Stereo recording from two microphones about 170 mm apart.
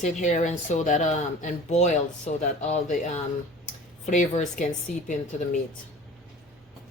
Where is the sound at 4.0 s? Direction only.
45° left (ahead or behind).